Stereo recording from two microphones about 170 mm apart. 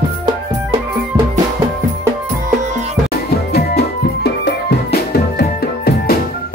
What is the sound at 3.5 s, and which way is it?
Music, 70° left (ahead or behind).